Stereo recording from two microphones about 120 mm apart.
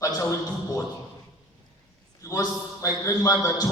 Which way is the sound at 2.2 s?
25° left (ahead or behind).